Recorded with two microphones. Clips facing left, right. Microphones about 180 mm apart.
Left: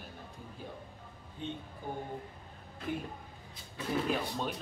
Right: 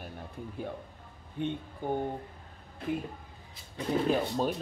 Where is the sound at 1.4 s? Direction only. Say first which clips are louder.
Right 7 dB; 60° right (ahead or behind).